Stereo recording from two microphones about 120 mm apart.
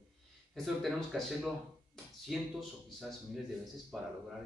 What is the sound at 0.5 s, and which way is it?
Speech, centre (ahead or behind).